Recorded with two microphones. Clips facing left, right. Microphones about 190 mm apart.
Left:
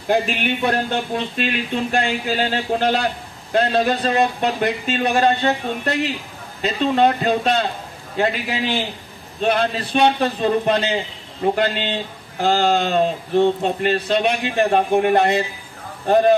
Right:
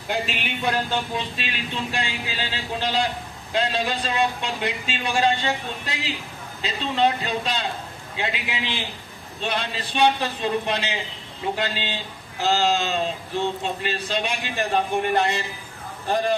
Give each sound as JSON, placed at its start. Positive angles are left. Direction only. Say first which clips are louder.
{"t": 0.1, "sound": "a man's voice", "louder": "left 8 dB", "side_deg": 55}
{"t": 9.4, "sound": "a man's voice", "louder": "left 9 dB", "side_deg": 55}